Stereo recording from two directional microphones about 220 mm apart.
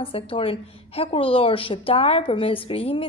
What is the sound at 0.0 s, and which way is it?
A woman's voice, 25° left (ahead or behind).